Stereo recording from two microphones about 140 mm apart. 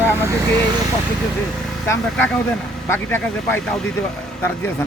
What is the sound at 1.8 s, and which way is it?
Speech, 20° left (ahead or behind).